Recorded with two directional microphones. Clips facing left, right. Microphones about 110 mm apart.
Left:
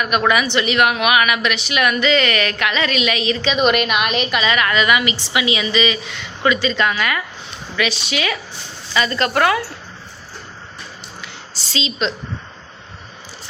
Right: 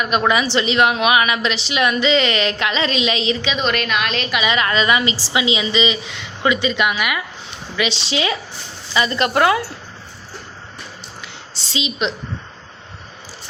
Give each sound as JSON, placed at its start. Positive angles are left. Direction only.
{"t": 0.0, "sound": "a woman's voice", "side_deg": -20}
{"t": 3.6, "sound": "a woman's voice", "side_deg": 10}
{"t": 4.4, "sound": "a woman's voice", "side_deg": -25}
{"t": 7.8, "sound": "a woman's voice", "side_deg": -25}
{"t": 11.2, "sound": "a sound", "side_deg": -25}